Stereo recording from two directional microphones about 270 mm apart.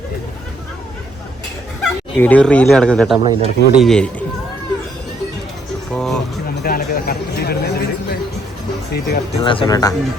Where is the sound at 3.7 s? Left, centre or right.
Centre.